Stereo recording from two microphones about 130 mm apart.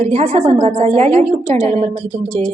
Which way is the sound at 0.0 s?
60° right (ahead or behind).